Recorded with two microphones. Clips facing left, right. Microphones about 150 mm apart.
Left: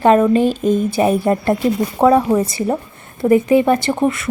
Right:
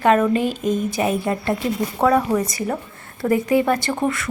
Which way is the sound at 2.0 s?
25° left (ahead or behind).